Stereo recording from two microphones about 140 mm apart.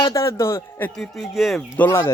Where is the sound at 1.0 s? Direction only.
Centre (ahead or behind).